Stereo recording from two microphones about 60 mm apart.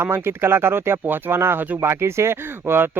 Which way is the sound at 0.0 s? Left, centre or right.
Right.